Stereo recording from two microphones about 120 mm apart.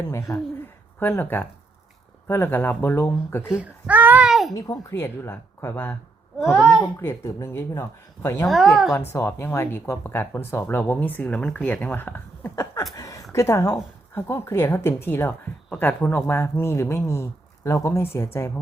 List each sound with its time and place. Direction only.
0.1 s speech: 25° left (ahead or behind)
3.5 s babbling: 10° right (ahead or behind)
4.5 s speech: 30° left (ahead or behind)
6.4 s a child's voice: 5° left (ahead or behind)
7.0 s speech: 25° left (ahead or behind)
8.4 s a child's voice: centre (ahead or behind)
8.9 s speech: 25° left (ahead or behind)
13.0 s a sound: 30° left (ahead or behind)
13.3 s speech: 25° left (ahead or behind)